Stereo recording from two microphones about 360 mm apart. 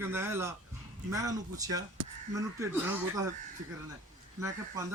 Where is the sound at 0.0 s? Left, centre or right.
Centre.